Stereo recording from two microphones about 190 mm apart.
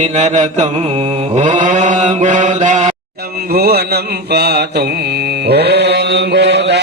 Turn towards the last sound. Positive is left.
turn(degrees=-65)  # may be behind; listen again after turning